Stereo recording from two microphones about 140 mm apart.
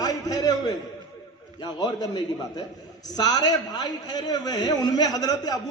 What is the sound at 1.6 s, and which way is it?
A man's voice, 30° left (ahead or behind).